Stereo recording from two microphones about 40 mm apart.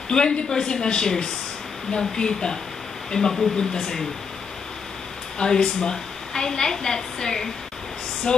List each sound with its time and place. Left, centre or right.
0.1 s a woman's voice: left
5.4 s a woman's voice: centre